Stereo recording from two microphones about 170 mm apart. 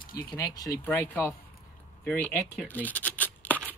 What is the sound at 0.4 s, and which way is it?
Speech, 25° left (ahead or behind).